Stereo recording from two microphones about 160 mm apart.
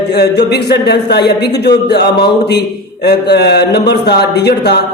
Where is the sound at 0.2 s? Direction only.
90° left.